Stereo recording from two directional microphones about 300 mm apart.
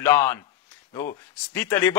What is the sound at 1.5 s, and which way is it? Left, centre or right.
Speech, centre.